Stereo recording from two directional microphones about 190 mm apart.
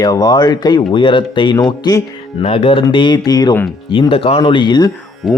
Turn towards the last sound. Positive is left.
turn(degrees=0)  # may be behind; listen again after turning